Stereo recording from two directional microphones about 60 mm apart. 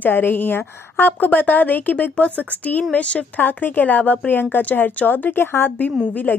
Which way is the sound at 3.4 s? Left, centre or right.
Left.